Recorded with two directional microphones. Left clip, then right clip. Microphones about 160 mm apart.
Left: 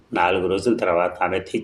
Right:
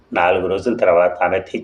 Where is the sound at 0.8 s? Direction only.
30° left (ahead or behind).